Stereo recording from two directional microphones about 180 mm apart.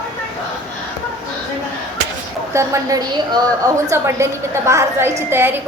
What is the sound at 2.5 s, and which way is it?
A woman's voice, 15° right (ahead or behind).